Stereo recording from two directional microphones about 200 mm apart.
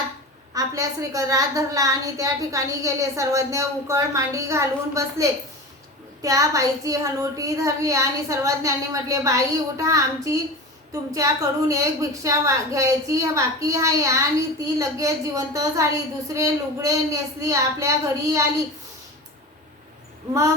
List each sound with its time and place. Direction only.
0.5 s a woman's voice: 15° right (ahead or behind)